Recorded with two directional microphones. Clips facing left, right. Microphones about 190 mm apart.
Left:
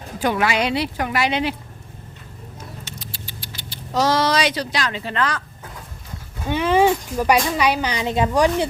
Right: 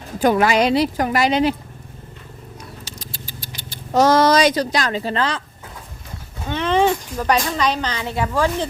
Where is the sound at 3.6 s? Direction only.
50° right (ahead or behind); by 5.4 s 30° right (ahead or behind).